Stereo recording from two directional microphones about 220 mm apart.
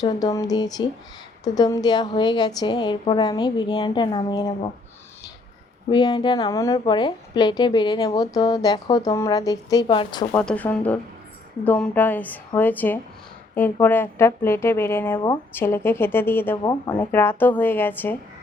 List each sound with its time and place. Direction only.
0.0 s a woman's voice: 15° left (ahead or behind)
5.9 s a woman's voice: 20° left (ahead or behind)
10.3 s a woman's voice: 5° left (ahead or behind)
16.6 s a woman's voice: 20° left (ahead or behind)
17.1 s a woman's voice: 10° left (ahead or behind)